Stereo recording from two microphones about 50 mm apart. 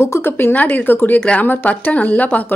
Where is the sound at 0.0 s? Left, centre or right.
Left.